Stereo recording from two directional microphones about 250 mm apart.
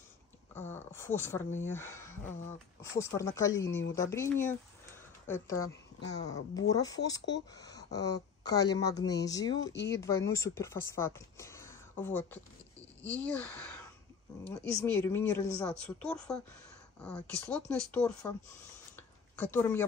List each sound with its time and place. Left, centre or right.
0.6 s a woman's voice: centre
6.2 s a woman's voice: centre
7.2 s speech: left
7.5 s a woman's voice: centre
14.8 s speech: centre
19.3 s a woman's voice: centre